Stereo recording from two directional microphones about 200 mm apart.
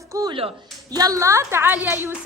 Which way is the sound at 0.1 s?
20° right (ahead or behind).